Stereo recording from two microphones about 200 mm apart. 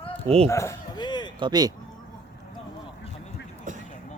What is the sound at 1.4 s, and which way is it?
Speech, 20° right (ahead or behind).